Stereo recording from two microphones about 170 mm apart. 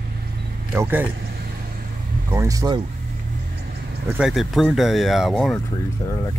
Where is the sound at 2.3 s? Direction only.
20° right (ahead or behind).